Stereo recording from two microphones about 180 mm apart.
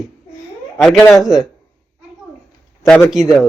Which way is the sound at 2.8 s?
Centre (ahead or behind).